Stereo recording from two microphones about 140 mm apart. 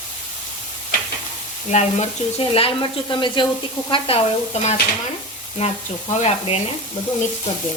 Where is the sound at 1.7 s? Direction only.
50° left (ahead or behind); by 3.5 s 35° left (ahead or behind).